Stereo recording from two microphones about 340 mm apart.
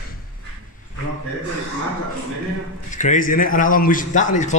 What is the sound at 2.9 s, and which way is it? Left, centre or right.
A man's voice, left.